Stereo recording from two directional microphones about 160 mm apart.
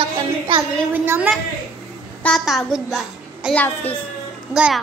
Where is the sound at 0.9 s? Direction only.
10° right (ahead or behind).